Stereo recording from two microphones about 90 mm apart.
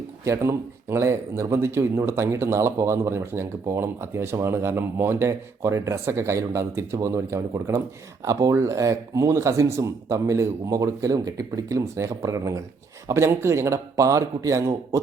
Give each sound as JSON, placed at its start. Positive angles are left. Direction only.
{"t": 0.3, "sound": "speech", "side_deg": -30}